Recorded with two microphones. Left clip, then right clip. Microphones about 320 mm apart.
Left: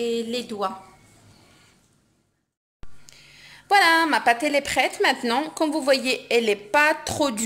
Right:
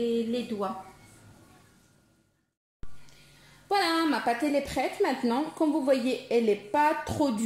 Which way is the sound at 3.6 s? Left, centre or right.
Left.